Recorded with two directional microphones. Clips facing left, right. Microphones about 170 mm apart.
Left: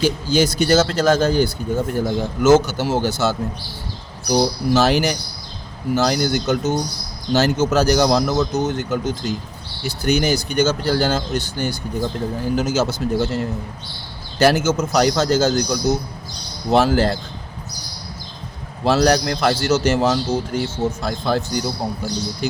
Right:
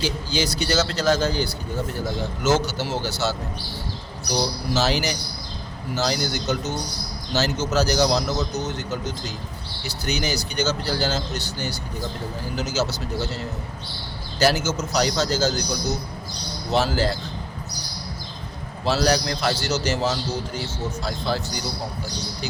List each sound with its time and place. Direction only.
0.0 s a man's voice: 50° left (ahead or behind)
18.9 s a man's voice: 55° left (ahead or behind)